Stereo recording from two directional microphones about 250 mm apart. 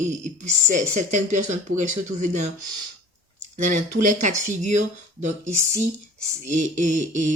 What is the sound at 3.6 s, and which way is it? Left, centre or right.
Speech, right.